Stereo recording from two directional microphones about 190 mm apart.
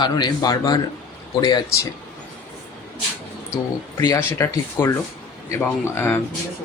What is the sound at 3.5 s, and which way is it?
Speech, 20° left (ahead or behind).